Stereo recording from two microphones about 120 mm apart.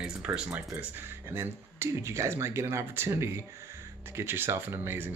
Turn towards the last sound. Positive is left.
turn(degrees=-20)  # may be behind; listen again after turning